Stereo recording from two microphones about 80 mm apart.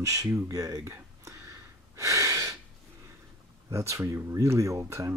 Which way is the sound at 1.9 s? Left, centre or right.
Right.